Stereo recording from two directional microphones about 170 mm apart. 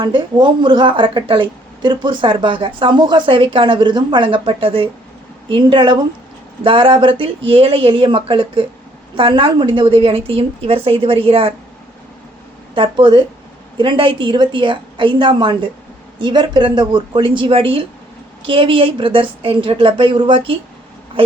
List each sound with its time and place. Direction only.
0.0 s a woman's voice: 25° right (ahead or behind)
12.7 s a woman's voice: 30° right (ahead or behind)